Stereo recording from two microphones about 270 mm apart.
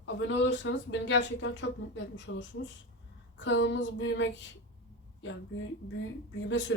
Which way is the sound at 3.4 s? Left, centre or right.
Left.